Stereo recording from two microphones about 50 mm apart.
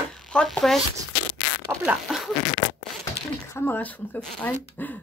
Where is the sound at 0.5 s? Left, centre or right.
Centre.